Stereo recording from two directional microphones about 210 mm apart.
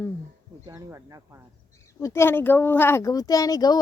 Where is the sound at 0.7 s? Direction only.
15° right (ahead or behind).